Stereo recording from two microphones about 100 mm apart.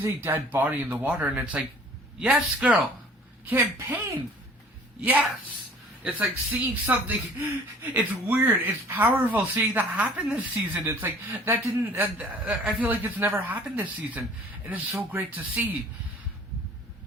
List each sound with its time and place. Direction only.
0.0 s speech: 20° right (ahead or behind)
3.4 s speech: 20° right (ahead or behind)
4.9 s a woman's voice: 15° right (ahead or behind)